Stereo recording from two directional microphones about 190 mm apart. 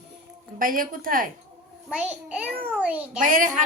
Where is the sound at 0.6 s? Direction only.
45° right (ahead or behind).